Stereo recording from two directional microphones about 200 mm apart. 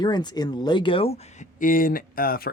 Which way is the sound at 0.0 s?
20° left (ahead or behind).